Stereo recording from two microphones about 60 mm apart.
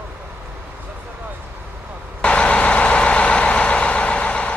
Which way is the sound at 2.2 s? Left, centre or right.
Centre.